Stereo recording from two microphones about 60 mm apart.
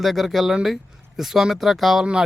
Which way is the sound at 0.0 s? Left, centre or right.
Centre.